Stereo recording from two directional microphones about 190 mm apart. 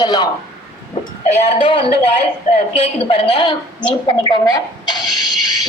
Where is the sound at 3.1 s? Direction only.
25° left (ahead or behind).